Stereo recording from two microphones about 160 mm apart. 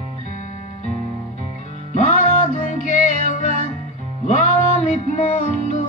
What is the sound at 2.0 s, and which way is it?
Music, 55° left (ahead or behind).